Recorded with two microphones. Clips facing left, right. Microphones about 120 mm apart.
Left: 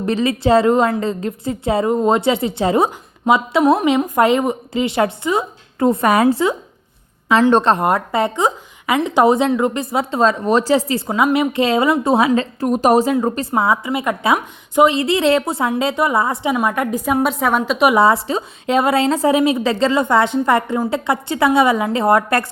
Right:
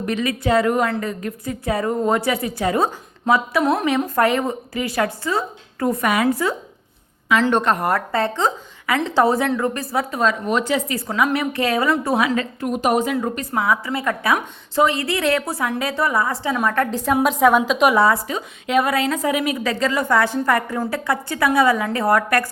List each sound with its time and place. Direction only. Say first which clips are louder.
0.0 s a woman's voice: left 5 dB; 30° left (ahead or behind); by 17.9 s 5° left (ahead or behind)
17.9 s a woman's voice: left 3 dB; 25° left (ahead or behind)